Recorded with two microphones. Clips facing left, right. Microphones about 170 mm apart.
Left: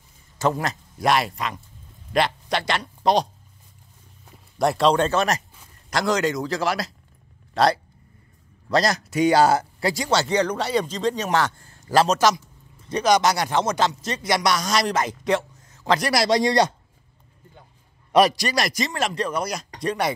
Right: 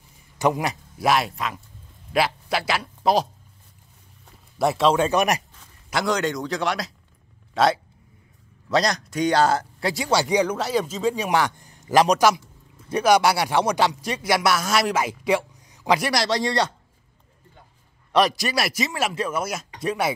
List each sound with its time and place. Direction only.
0.4 s speech: 15° right (ahead or behind)
1.0 s speech: centre (ahead or behind)
4.6 s a man's voice: centre (ahead or behind)
5.9 s a man's voice: centre (ahead or behind)
16.1 s a man's voice: 10° left (ahead or behind)
18.1 s speech: centre (ahead or behind)